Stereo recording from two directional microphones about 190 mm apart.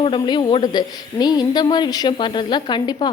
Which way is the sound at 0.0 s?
25° left (ahead or behind).